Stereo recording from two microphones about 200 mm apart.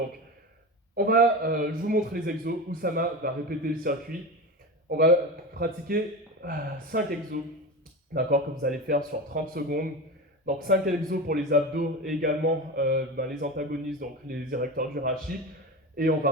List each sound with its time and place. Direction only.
0.9 s a man's voice: 45° right (ahead or behind)